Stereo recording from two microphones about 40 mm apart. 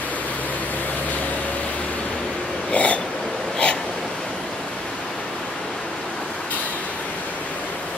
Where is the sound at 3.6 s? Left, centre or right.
Left.